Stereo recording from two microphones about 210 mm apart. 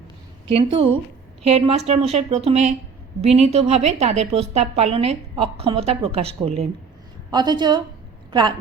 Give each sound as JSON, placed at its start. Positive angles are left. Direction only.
{"t": 0.4, "sound": "a woman's voice", "side_deg": -25}